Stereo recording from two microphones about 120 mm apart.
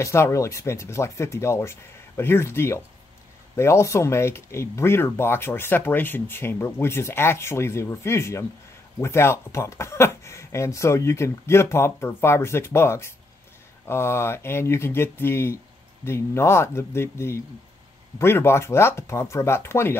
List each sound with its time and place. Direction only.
0.0 s speech: 25° left (ahead or behind)